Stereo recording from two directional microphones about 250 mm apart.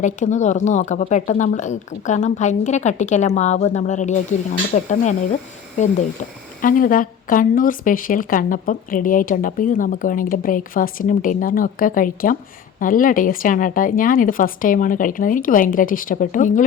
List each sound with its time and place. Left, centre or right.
0.0 s speech: left